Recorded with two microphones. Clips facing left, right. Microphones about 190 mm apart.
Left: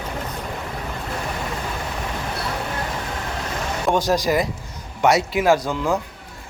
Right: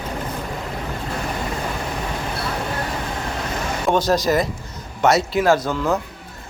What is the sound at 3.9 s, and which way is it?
Speech, 15° left (ahead or behind).